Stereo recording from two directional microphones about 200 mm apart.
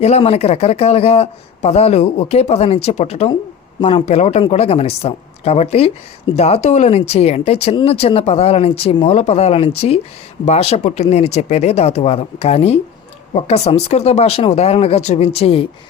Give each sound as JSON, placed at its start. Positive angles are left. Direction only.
{"t": 0.0, "sound": "speech", "side_deg": 30}